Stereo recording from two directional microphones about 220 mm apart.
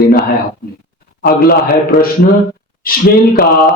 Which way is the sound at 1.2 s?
45° left (ahead or behind).